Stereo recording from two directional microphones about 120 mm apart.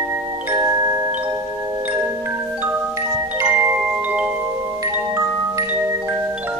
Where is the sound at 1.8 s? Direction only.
20° right (ahead or behind).